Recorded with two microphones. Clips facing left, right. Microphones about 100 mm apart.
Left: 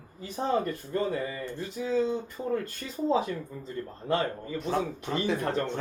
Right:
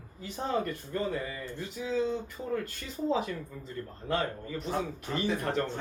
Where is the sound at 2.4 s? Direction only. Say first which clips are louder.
Left 3 dB; 20° left (ahead or behind).